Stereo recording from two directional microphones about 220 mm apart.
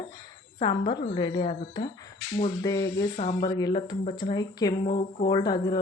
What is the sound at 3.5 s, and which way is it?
Speech, 20° left (ahead or behind).